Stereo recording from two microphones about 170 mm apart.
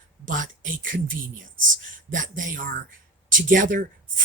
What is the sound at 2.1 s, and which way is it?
Speech, 50° right (ahead or behind).